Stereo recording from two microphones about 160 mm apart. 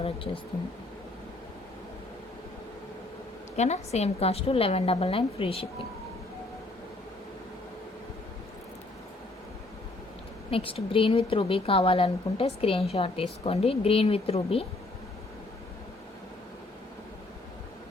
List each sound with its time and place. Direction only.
3.5 s a woman's voice: 45° left (ahead or behind)
10.5 s a woman's voice: 35° left (ahead or behind)